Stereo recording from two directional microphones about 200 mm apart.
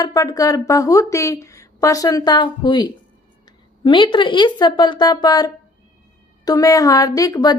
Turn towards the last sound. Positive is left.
turn(degrees=20)  # may be behind; listen again after turning